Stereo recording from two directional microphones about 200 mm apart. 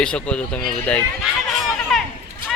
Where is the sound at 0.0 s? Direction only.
5° left (ahead or behind).